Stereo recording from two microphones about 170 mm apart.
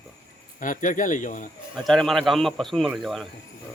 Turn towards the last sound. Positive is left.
turn(degrees=0)  # may be behind; listen again after turning